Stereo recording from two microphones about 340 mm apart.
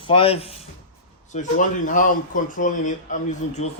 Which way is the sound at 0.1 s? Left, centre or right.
Centre.